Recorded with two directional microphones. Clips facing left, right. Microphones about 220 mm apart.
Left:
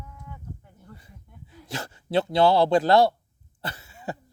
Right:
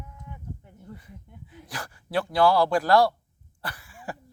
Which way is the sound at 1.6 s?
25° left (ahead or behind).